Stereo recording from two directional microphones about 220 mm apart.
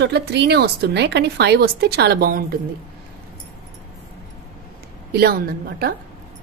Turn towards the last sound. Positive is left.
turn(degrees=-45)  # may be behind; listen again after turning